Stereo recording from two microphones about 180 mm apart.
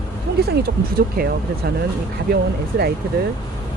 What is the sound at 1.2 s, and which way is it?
Speech, 60° right (ahead or behind).